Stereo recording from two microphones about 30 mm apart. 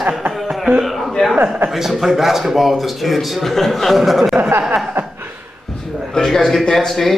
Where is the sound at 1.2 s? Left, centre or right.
Left.